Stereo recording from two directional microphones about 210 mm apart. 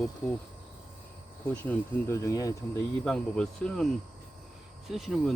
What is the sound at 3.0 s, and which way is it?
Speech, 5° left (ahead or behind).